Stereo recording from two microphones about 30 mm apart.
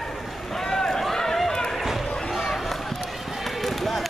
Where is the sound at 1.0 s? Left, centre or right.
Centre.